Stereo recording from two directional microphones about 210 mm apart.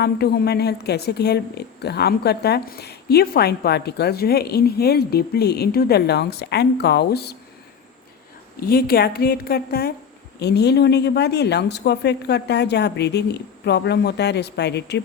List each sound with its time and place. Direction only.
0.0 s a woman's voice: 50° left (ahead or behind)
8.6 s a woman's voice: 45° left (ahead or behind)